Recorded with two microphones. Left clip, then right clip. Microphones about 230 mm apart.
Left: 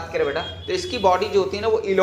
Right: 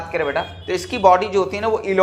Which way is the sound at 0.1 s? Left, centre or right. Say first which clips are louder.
Right 2 dB; right.